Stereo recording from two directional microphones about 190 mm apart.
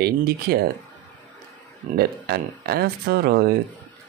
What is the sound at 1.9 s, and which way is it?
Speech, 55° right (ahead or behind).